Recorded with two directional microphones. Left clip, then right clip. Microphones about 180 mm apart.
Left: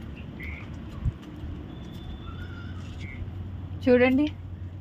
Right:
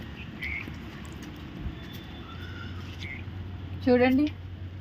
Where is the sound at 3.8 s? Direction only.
25° left (ahead or behind).